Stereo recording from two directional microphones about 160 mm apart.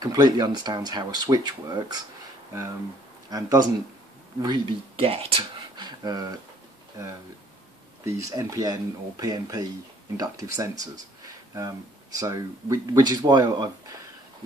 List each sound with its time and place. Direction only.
0.0 s speech: 25° right (ahead or behind)
3.3 s speech: 25° right (ahead or behind)
8.0 s speech: 20° right (ahead or behind)